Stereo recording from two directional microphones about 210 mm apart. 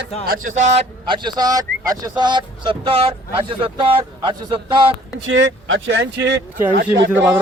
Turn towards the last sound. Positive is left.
turn(degrees=-10)  # may be behind; listen again after turning